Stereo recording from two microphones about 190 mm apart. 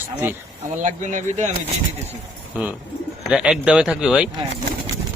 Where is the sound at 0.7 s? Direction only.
40° right (ahead or behind).